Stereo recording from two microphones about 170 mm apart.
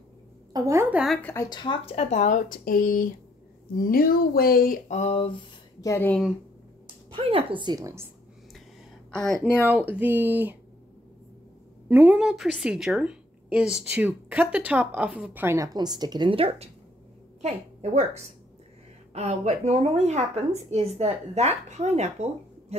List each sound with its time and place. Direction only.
0.5 s a woman's voice: 20° right (ahead or behind)
0.9 s speech: centre (ahead or behind)
1.2 s speech: 15° left (ahead or behind); by 5.4 s 35° left (ahead or behind)
5.8 s speech: 15° left (ahead or behind)
7.1 s a woman's voice: 35° right (ahead or behind); by 8.1 s 15° right (ahead or behind)
9.1 s speech: centre (ahead or behind)
9.7 s a woman's voice: 10° right (ahead or behind)
11.9 s a woman's voice: 10° right (ahead or behind); by 16.7 s 35° right (ahead or behind)
19.1 s a woman's voice: 40° right (ahead or behind)